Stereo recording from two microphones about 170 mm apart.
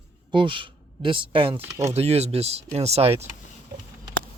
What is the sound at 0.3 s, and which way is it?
Speech, 30° right (ahead or behind).